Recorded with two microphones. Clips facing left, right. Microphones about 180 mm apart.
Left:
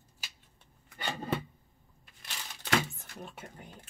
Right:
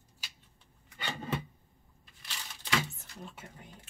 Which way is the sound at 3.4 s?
50° left (ahead or behind).